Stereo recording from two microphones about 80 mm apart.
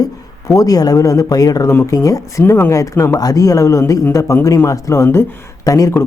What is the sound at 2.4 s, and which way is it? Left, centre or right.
Speech, left.